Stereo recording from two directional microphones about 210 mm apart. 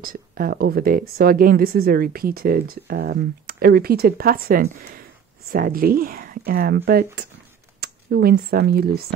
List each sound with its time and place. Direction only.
0.0 s speech: 45° right (ahead or behind)